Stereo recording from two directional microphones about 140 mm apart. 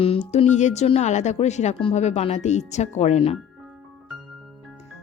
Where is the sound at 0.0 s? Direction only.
50° left (ahead or behind).